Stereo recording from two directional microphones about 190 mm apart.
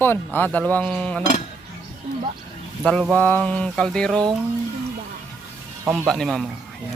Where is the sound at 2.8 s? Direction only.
5° left (ahead or behind).